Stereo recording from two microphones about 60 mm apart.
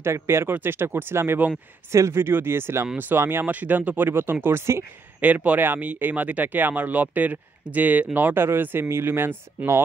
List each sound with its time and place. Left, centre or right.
0.0 s speech: right
1.9 s speech: right
3.4 s speech: right
5.2 s speech: right